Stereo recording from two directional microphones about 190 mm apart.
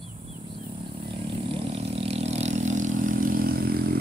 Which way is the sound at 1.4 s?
30° right (ahead or behind).